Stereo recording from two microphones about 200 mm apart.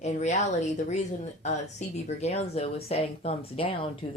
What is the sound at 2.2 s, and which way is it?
Speech, 35° left (ahead or behind).